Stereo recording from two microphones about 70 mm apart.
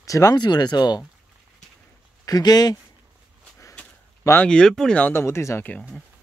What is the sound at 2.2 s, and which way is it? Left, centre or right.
Speech, left.